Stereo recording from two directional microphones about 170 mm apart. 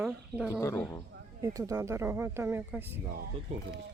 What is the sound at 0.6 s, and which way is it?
Speech, 15° left (ahead or behind).